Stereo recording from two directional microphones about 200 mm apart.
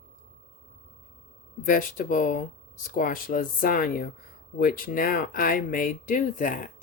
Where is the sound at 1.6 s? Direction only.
45° left (ahead or behind).